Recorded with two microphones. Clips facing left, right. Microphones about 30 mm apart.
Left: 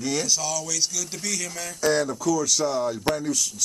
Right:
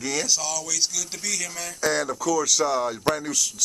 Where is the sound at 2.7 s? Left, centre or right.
Centre.